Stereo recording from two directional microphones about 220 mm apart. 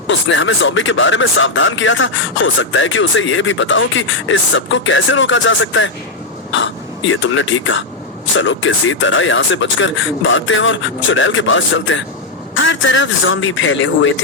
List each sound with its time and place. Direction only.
0.1 s speech: 60° left (ahead or behind)